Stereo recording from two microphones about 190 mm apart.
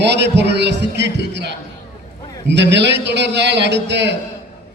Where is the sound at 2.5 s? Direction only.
65° right (ahead or behind).